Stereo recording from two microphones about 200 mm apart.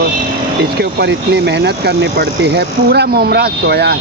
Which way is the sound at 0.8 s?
55° right (ahead or behind).